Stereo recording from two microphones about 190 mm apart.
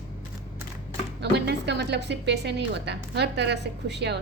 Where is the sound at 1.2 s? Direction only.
65° right (ahead or behind).